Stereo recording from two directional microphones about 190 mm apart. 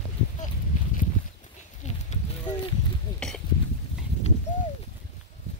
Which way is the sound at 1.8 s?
40° left (ahead or behind).